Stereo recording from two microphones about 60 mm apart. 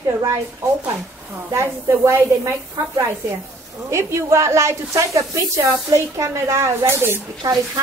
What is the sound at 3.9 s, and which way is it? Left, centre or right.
Speech, right.